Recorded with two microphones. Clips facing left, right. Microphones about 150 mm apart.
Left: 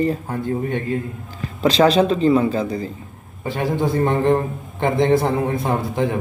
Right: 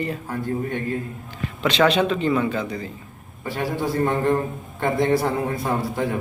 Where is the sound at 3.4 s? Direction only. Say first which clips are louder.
Left 4 dB; 20° left (ahead or behind).